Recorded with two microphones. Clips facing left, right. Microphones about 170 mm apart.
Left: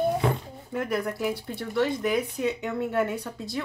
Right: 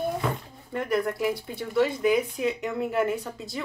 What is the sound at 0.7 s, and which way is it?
Speech, centre (ahead or behind).